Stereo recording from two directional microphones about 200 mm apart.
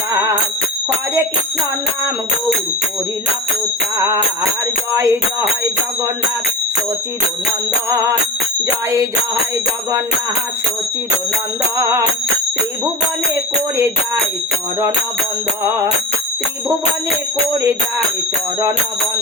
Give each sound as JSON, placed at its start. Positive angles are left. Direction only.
{"t": 0.1, "sound": "music", "side_deg": -15}
{"t": 3.9, "sound": "music", "side_deg": -15}
{"t": 4.9, "sound": "jingle bell", "side_deg": -15}
{"t": 7.9, "sound": "jingle bell", "side_deg": -15}
{"t": 11.8, "sound": "jingle bell", "side_deg": -15}